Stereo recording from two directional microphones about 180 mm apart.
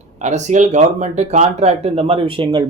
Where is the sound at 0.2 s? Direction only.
40° right (ahead or behind).